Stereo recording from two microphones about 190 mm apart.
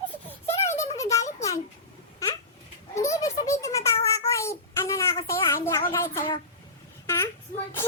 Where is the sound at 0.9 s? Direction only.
15° left (ahead or behind).